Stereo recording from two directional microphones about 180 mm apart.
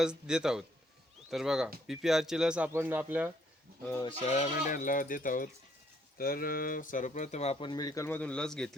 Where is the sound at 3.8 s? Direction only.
15° left (ahead or behind).